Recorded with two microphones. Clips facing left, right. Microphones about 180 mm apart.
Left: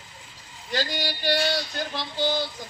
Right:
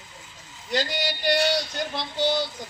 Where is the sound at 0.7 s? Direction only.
20° right (ahead or behind).